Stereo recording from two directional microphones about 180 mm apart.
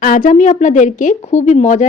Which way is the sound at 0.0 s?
50° left (ahead or behind).